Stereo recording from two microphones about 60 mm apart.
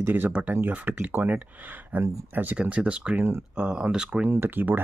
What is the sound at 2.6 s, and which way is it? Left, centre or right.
Speech, centre.